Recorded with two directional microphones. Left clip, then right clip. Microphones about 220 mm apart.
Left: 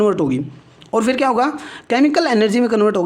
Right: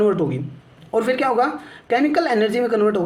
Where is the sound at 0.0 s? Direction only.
50° left (ahead or behind).